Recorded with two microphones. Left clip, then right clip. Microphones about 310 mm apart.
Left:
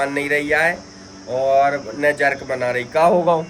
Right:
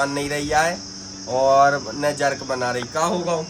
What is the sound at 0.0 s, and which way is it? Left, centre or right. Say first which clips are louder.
Speech: left 4 dB; centre.